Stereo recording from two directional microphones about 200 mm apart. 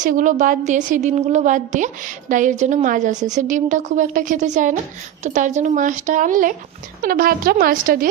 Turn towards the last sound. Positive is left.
turn(degrees=-45)  # may be behind; listen again after turning